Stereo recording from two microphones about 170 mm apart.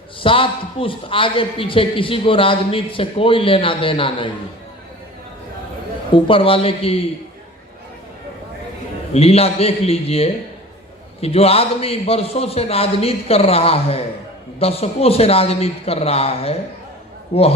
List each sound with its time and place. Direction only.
0.2 s a man's voice: 30° left (ahead or behind)
6.1 s a man's voice: 30° left (ahead or behind)
9.1 s a man's voice: 35° left (ahead or behind)